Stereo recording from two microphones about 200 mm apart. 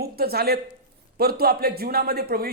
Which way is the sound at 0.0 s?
50° right (ahead or behind).